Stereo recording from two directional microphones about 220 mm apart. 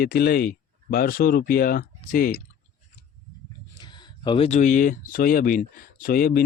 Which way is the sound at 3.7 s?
20° left (ahead or behind).